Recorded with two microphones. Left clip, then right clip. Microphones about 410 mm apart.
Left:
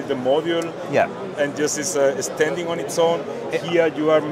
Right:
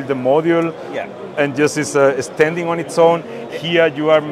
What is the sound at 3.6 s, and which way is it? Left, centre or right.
Speech, right.